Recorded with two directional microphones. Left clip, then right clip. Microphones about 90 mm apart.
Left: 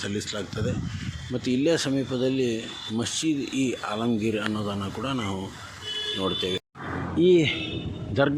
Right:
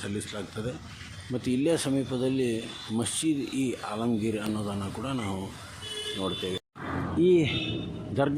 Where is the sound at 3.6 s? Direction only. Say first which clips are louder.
Left 3 dB; 15° left (ahead or behind).